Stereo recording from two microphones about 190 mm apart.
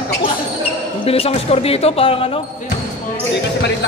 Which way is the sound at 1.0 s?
30° left (ahead or behind).